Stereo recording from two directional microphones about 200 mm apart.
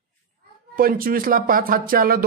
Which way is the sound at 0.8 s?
45° right (ahead or behind).